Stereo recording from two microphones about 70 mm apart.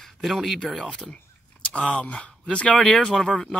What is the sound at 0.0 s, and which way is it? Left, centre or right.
Speech, centre.